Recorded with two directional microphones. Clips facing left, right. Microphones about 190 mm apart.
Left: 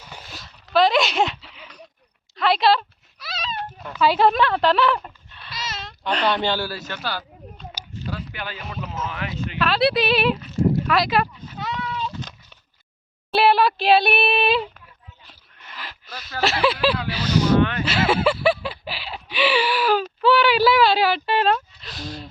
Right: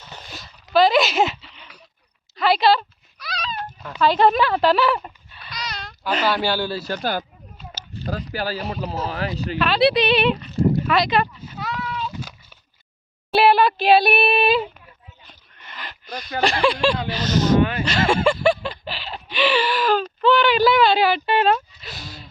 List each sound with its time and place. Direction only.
0.0 s a sound: 10° left (ahead or behind)
4.0 s speech: 5° left (ahead or behind)
6.7 s speech: 35° right (ahead or behind)
7.0 s speech: 50° right (ahead or behind)
7.6 s a sound: 5° right (ahead or behind)
7.9 s speech: 40° right (ahead or behind)
9.6 s speech: centre (ahead or behind)
11.3 s goat: 5° right (ahead or behind)
13.3 s a sound: centre (ahead or behind)